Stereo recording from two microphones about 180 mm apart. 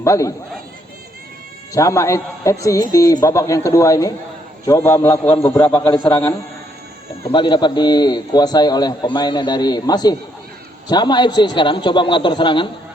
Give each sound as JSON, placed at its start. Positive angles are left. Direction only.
{"t": 0.0, "sound": "speech", "side_deg": 15}
{"t": 1.7, "sound": "speech", "side_deg": 20}
{"t": 7.3, "sound": "a man's voice", "side_deg": 25}